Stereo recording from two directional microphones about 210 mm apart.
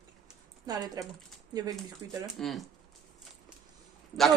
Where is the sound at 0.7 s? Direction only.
20° right (ahead or behind).